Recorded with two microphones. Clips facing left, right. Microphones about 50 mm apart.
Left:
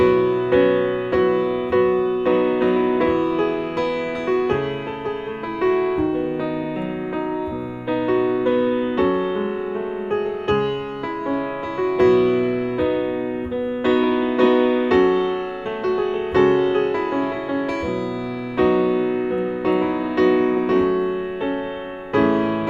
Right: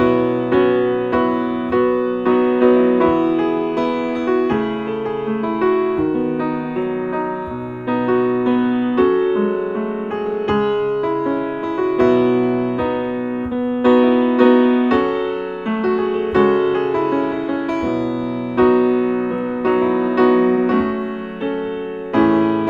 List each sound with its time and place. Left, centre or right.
0.0 s music: centre
0.5 s music: centre
3.3 s music: centre
5.6 s music: centre
8.1 s music: centre
11.8 s music: centre
13.8 s music: centre
18.6 s music: centre
22.1 s music: right